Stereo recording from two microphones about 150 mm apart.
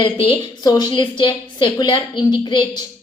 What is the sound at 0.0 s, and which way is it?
A woman's voice, 35° left (ahead or behind).